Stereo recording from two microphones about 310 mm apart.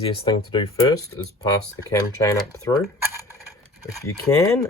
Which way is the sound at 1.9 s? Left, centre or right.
Centre.